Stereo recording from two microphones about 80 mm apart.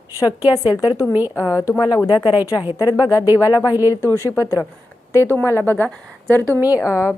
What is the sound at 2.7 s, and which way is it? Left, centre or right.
Speech, left.